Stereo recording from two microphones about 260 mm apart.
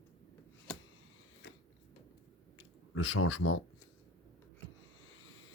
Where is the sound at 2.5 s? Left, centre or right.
Left.